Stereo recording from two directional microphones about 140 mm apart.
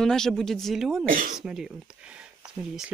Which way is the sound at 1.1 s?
85° right.